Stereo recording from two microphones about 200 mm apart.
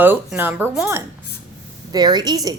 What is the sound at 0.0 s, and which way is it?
Speech, 10° right (ahead or behind).